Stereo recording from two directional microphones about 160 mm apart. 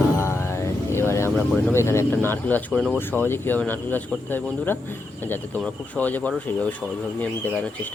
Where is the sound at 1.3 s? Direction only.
5° left (ahead or behind).